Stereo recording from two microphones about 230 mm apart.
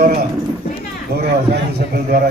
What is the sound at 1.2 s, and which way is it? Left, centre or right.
A man's voice, right.